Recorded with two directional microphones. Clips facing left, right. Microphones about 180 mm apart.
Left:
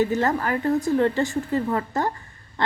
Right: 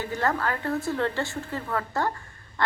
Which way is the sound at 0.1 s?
20° left (ahead or behind).